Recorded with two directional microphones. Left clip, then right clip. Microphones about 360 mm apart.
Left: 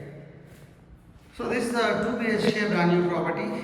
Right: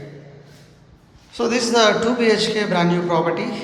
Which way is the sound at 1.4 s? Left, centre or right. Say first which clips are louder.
Right 9 dB; centre.